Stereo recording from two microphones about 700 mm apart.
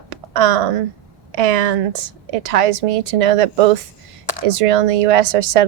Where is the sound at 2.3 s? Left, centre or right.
Right.